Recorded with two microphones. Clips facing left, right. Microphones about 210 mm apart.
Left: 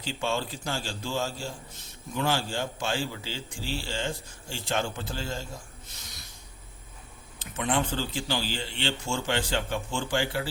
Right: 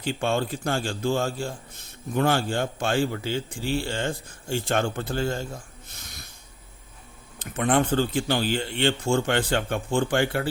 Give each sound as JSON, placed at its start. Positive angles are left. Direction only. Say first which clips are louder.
{"t": 0.0, "sound": "a man's voice", "louder": "right 5 dB", "side_deg": -55}
{"t": 7.3, "sound": "a man's voice", "louder": "right 6 dB", "side_deg": -55}